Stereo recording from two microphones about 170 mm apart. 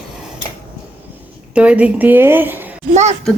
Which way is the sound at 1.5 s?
5° right (ahead or behind).